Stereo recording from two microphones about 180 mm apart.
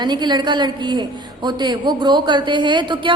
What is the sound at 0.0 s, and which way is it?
A woman's voice, 25° right (ahead or behind).